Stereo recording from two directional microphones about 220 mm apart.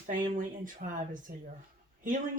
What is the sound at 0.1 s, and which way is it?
Speech, 35° right (ahead or behind).